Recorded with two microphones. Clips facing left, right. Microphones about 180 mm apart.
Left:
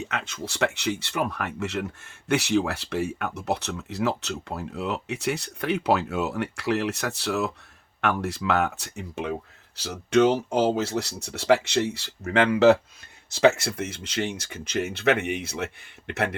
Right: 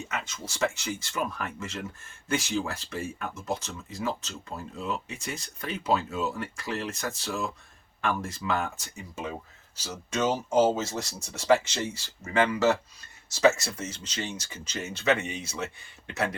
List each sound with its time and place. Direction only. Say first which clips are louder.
0.1 s speech: left 4 dB; 65° left (ahead or behind)